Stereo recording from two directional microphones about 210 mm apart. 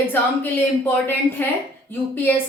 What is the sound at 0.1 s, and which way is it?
A woman's voice, 10° left (ahead or behind).